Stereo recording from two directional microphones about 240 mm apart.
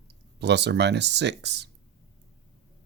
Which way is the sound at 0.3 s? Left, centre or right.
Right.